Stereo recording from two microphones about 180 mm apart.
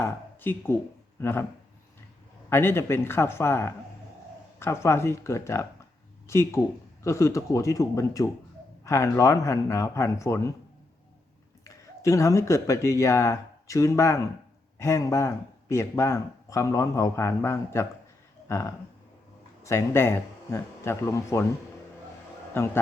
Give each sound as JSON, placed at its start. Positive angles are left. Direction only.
{"t": 0.0, "sound": "speech", "side_deg": 10}
{"t": 2.5, "sound": "speech", "side_deg": 15}
{"t": 11.6, "sound": "speech", "side_deg": 15}
{"t": 19.6, "sound": "speech", "side_deg": 15}
{"t": 22.5, "sound": "speech", "side_deg": 15}